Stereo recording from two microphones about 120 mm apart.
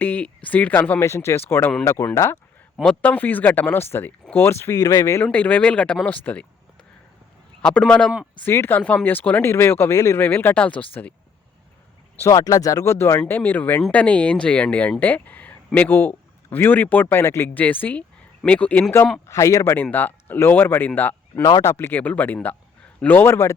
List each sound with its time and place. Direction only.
0.0 s speech: 15° left (ahead or behind)
2.7 s speech: 5° left (ahead or behind); by 5.2 s 30° left (ahead or behind)
5.2 s speech: 15° left (ahead or behind)
7.6 s speech: 10° left (ahead or behind)
12.2 s speech: 25° left (ahead or behind)